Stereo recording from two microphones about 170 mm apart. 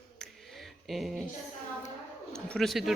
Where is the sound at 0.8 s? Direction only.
Centre (ahead or behind).